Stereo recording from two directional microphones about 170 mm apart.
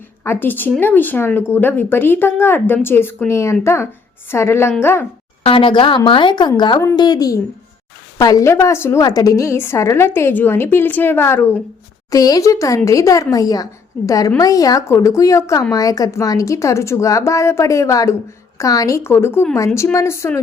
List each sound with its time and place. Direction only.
0.3 s a woman's voice: 10° left (ahead or behind)
5.4 s a woman's voice: 30° left (ahead or behind); by 20.4 s 15° left (ahead or behind)